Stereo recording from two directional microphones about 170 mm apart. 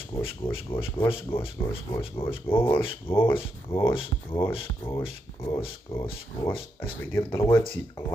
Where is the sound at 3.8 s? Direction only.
30° left (ahead or behind).